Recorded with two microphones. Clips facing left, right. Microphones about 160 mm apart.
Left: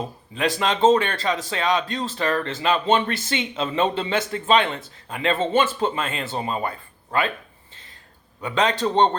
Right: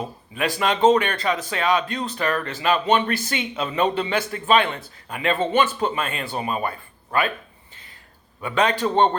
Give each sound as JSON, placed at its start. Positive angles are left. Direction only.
{"t": 0.3, "sound": "speech", "side_deg": 25}
{"t": 8.4, "sound": "speech", "side_deg": 20}